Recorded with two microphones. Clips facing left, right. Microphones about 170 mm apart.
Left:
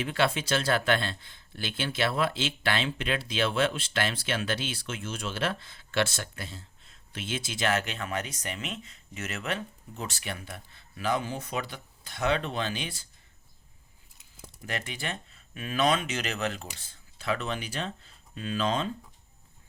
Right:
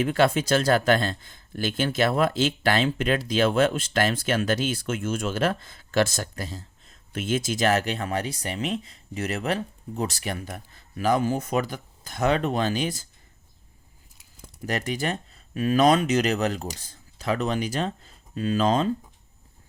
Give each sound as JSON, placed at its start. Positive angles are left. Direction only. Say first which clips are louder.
{"t": 0.0, "sound": "speech", "louder": "right 6 dB", "side_deg": -45}
{"t": 14.7, "sound": "speech", "louder": "right 8 dB", "side_deg": -40}